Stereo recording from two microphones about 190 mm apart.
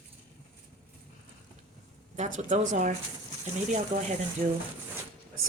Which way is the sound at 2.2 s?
40° right (ahead or behind).